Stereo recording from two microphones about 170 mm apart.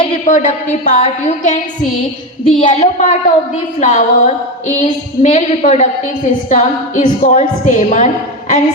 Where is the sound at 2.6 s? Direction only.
45° left (ahead or behind).